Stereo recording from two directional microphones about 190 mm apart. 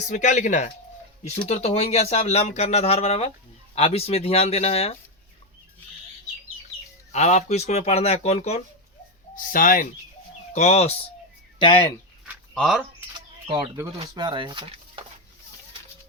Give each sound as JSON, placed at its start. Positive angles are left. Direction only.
{"t": 0.1, "sound": "speech", "side_deg": 40}
{"t": 7.1, "sound": "speech", "side_deg": 35}
{"t": 9.3, "sound": "speech", "side_deg": 45}
{"t": 12.5, "sound": "speech", "side_deg": 0}
{"t": 13.1, "sound": "speech", "side_deg": -20}